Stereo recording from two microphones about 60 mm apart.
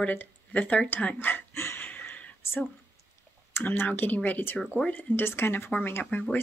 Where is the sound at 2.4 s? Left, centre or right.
Left.